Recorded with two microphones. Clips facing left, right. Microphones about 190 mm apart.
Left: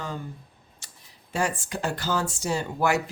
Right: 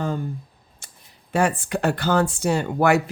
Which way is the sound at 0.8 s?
50° right (ahead or behind).